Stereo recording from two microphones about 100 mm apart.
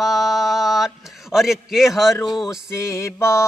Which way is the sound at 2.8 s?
30° left (ahead or behind).